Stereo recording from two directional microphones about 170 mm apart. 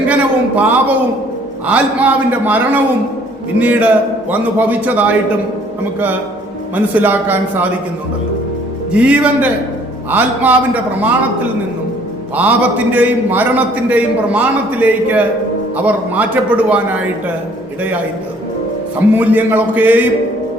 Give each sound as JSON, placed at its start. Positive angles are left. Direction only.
{"t": 0.1, "sound": "a man's voice", "side_deg": -10}
{"t": 6.7, "sound": "a man's voice", "side_deg": -10}
{"t": 8.9, "sound": "a man's voice", "side_deg": -5}
{"t": 12.4, "sound": "a man's voice", "side_deg": -10}
{"t": 19.1, "sound": "a man's voice", "side_deg": -10}